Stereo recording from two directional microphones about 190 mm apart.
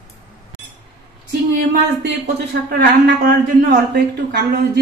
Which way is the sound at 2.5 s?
55° right (ahead or behind).